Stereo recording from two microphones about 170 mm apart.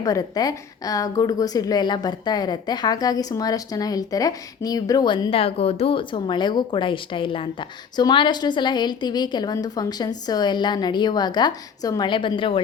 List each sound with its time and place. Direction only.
0.0 s a woman's voice: 20° left (ahead or behind)